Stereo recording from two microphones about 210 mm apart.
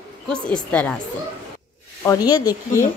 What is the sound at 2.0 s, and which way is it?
Speech, 15° left (ahead or behind).